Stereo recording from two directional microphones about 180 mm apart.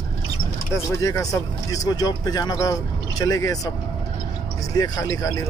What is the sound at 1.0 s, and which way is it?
Speech, 20° left (ahead or behind).